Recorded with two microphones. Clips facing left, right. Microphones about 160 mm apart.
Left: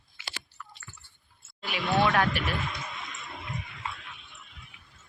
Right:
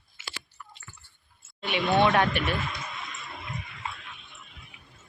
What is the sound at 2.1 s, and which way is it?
Speech, centre (ahead or behind).